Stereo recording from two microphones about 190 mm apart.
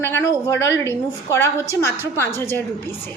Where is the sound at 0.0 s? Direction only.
15° left (ahead or behind).